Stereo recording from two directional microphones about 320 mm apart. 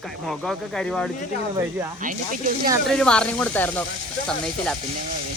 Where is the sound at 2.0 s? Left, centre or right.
Right.